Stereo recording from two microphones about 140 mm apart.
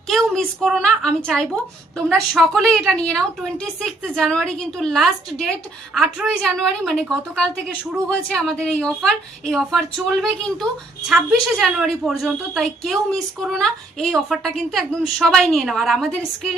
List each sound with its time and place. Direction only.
0.1 s a woman's voice: centre (ahead or behind)